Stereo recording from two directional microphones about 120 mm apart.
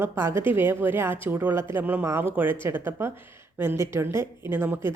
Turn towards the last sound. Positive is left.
turn(degrees=-20)  # may be behind; listen again after turning